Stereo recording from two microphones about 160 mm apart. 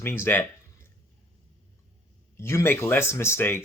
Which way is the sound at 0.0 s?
15° left (ahead or behind).